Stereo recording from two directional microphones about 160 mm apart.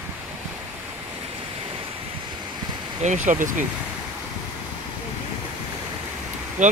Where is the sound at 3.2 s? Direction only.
55° right (ahead or behind).